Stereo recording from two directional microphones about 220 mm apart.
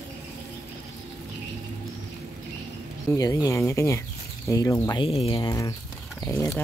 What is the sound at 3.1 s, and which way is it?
Speech, 15° left (ahead or behind).